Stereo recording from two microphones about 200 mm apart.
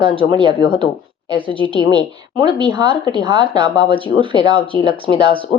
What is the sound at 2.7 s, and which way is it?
Speech, 20° right (ahead or behind).